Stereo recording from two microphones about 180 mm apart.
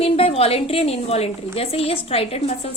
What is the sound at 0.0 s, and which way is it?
A woman's voice, 35° left (ahead or behind).